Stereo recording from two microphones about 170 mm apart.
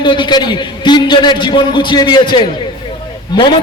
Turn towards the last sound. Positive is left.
turn(degrees=25)  # may be behind; listen again after turning